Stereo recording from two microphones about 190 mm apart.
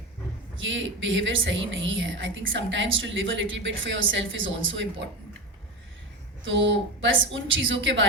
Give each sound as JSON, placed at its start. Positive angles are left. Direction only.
{"t": 0.5, "sound": "a woman's voice", "side_deg": -85}
{"t": 6.4, "sound": "a woman's voice", "side_deg": -75}